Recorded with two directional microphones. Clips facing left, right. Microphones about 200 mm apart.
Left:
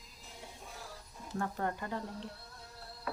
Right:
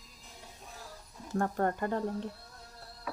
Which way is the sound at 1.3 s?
50° right (ahead or behind).